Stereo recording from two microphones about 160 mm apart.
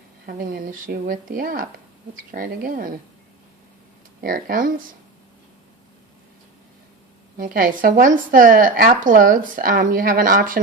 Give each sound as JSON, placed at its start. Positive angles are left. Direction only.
{"t": 0.3, "sound": "speech", "side_deg": -65}
{"t": 4.2, "sound": "speech", "side_deg": -65}
{"t": 7.3, "sound": "speech", "side_deg": -60}